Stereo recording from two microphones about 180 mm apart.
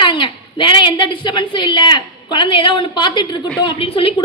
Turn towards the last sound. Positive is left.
turn(degrees=30)  # may be behind; listen again after turning